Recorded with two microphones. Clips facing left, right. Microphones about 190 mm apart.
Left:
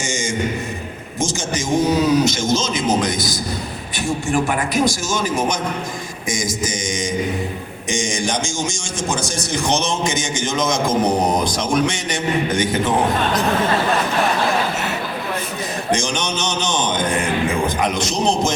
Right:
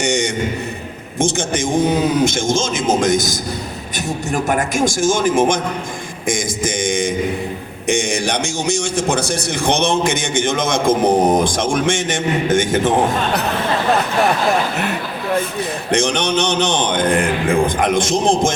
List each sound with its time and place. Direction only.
0.0 s a man's voice: 65° right (ahead or behind); by 12.8 s 45° right (ahead or behind)
15.9 s a man's voice: 60° right (ahead or behind)